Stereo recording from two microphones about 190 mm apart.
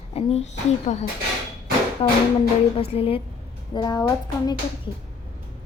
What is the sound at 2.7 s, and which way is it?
A woman's voice, 30° left (ahead or behind).